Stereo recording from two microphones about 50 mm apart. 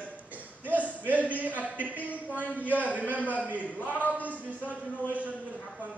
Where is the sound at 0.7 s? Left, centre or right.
Right.